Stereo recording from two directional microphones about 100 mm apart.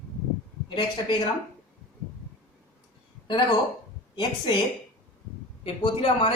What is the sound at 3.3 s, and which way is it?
A man's voice, 50° left (ahead or behind).